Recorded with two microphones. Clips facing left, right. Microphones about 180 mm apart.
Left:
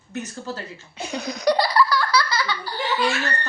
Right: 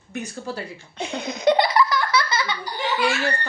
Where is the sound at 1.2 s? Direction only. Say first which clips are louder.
Right 2 dB; 25° right (ahead or behind).